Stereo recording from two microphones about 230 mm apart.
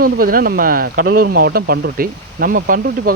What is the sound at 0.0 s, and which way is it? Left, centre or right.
Speech, right.